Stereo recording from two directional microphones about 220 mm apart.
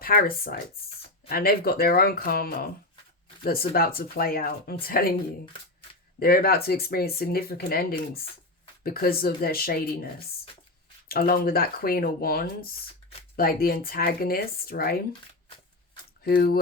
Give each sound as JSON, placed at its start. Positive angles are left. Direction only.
{"t": 0.0, "sound": "speech", "side_deg": 40}
{"t": 6.1, "sound": "speech", "side_deg": 45}
{"t": 11.1, "sound": "speech", "side_deg": 40}
{"t": 16.2, "sound": "speech", "side_deg": 45}